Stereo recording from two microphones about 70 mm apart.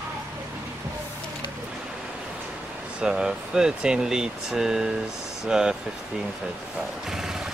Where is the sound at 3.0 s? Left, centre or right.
Centre.